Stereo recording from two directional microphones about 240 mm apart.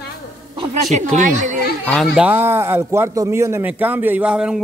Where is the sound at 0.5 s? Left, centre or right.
Right.